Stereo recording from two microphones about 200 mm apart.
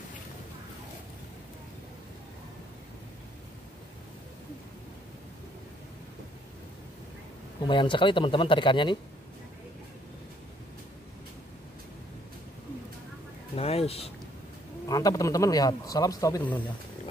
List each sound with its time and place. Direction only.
7.6 s speech: 25° left (ahead or behind)
13.6 s a sound: 30° left (ahead or behind)
14.9 s speech: 20° left (ahead or behind)